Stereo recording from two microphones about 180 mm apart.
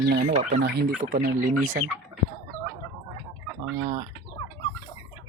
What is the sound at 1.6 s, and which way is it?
Speech, 45° right (ahead or behind).